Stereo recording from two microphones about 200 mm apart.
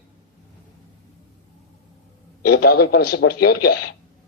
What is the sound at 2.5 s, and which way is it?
A man's voice, 55° left (ahead or behind).